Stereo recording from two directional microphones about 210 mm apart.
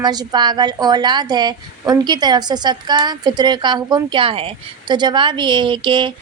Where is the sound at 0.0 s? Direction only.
20° right (ahead or behind).